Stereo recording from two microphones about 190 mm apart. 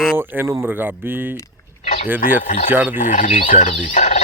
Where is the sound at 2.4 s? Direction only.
40° left (ahead or behind).